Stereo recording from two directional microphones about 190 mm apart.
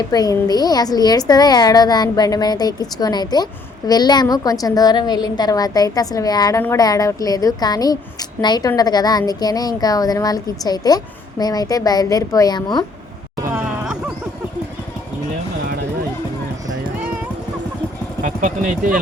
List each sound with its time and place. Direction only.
0.1 s a woman's voice: 20° left (ahead or behind)
13.4 s a sound: 10° right (ahead or behind)
18.2 s speech: 45° right (ahead or behind)